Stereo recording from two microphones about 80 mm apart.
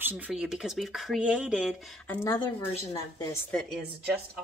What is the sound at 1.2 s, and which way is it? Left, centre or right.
Speech, centre.